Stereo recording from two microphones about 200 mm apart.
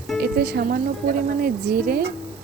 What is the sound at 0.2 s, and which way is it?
Speech, 55° right (ahead or behind).